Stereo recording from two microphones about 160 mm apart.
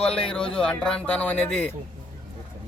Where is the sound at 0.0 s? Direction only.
35° left (ahead or behind).